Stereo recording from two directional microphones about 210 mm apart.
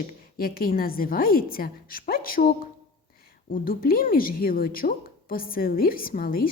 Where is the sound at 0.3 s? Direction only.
45° left (ahead or behind).